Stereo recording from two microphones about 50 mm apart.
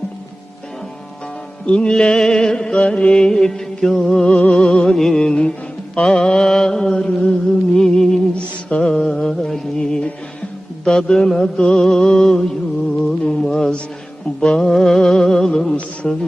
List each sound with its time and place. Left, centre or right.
1.6 s music: centre
5.9 s mantra: centre
8.8 s music: centre
16.0 s speech: left